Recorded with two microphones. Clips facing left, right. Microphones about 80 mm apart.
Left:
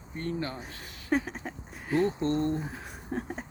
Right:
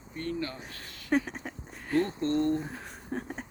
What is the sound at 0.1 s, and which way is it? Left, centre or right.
Speech, left.